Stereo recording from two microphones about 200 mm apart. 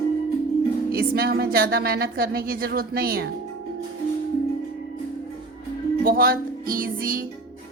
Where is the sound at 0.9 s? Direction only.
50° right (ahead or behind).